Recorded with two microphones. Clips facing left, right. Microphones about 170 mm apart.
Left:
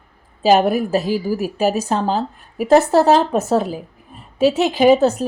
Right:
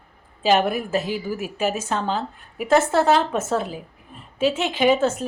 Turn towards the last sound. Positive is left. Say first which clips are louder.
# left 6 dB
turn(degrees=35)  # may be behind; listen again after turning